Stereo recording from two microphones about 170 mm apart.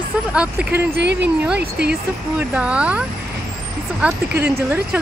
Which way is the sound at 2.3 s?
5° right (ahead or behind).